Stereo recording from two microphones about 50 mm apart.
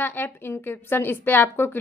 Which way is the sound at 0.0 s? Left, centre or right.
Left.